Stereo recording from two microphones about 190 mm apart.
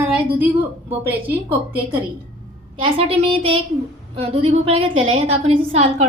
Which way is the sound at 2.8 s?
30° right (ahead or behind).